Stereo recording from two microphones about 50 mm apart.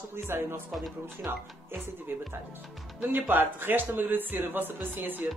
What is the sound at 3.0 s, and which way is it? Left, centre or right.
Speech, right.